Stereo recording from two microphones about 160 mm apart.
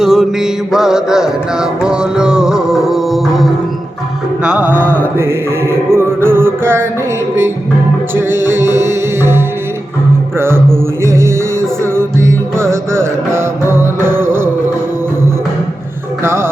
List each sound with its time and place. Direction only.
0.0 s mantra: centre (ahead or behind)
4.4 s music: 10° right (ahead or behind)
4.7 s mantra: 10° left (ahead or behind)
5.9 s music: 15° right (ahead or behind)
8.1 s music: 15° right (ahead or behind)
16.2 s music: 15° right (ahead or behind)